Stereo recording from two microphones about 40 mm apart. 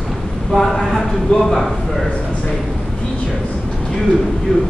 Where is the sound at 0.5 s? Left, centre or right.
Centre.